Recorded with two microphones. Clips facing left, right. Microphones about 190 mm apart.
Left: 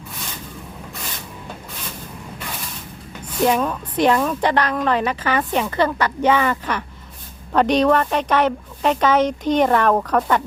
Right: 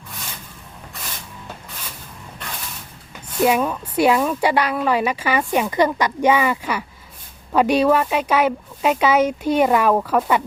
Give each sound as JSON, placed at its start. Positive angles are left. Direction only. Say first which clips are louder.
{"t": 3.4, "sound": "speech", "louder": "right 1 dB", "side_deg": -10}